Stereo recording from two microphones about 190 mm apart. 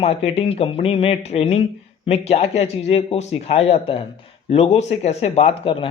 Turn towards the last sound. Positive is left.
turn(degrees=30)  # may be behind; listen again after turning